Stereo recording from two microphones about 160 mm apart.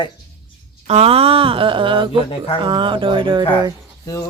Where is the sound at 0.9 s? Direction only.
40° right (ahead or behind).